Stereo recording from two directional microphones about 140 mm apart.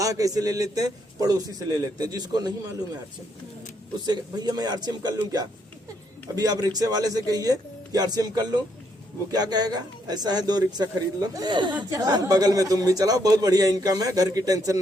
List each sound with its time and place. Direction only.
0.0 s a man's voice: 25° right (ahead or behind)
4.0 s a man's voice: 30° right (ahead or behind)